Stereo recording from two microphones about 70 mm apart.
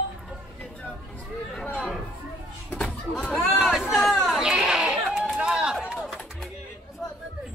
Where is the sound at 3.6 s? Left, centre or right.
Centre.